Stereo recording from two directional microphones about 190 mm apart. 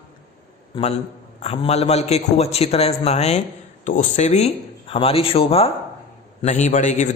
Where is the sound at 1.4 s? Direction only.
35° left (ahead or behind).